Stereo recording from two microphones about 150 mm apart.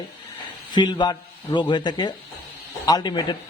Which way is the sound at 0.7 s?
30° left (ahead or behind).